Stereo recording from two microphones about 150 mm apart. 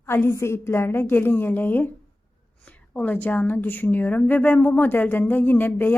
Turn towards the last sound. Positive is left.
turn(degrees=15)  # may be behind; listen again after turning